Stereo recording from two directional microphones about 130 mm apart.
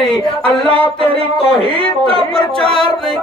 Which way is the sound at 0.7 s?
45° right (ahead or behind).